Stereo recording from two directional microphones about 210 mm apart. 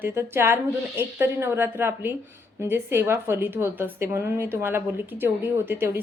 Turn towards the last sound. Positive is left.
turn(degrees=-10)  # may be behind; listen again after turning